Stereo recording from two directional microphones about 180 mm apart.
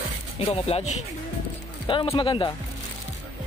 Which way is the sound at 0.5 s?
35° left (ahead or behind).